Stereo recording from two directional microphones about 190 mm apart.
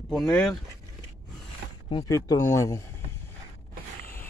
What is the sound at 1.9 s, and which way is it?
Speech, 20° left (ahead or behind).